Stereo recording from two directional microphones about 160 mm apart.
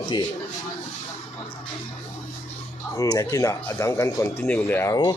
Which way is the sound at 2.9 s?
20° left (ahead or behind).